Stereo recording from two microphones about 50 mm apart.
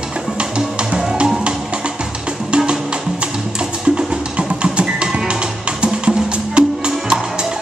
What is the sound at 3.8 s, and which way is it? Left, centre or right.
Music, centre.